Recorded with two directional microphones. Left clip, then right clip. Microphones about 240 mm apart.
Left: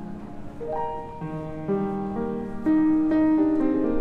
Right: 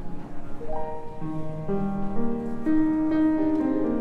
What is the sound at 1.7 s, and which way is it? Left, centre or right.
Music, left.